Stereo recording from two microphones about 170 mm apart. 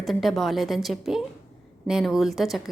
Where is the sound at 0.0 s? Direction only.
Centre (ahead or behind).